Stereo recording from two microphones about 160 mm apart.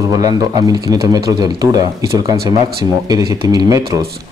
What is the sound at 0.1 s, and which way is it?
A man's voice, 25° right (ahead or behind).